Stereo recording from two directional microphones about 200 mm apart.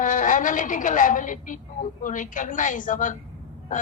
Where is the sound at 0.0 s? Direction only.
40° left (ahead or behind).